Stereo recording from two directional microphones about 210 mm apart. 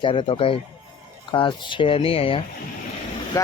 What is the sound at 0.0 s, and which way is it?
Speech, 25° left (ahead or behind).